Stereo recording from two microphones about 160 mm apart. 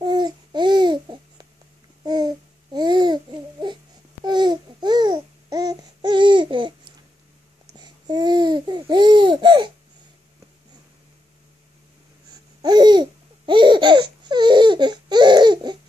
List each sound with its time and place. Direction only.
0.0 s babbling: 30° right (ahead or behind)
7.7 s babbling: 25° right (ahead or behind)
12.6 s laughter: 25° right (ahead or behind)